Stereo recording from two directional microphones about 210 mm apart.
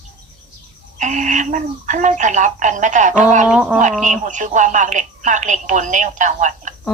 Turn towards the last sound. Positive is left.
turn(degrees=-35)  # may be behind; listen again after turning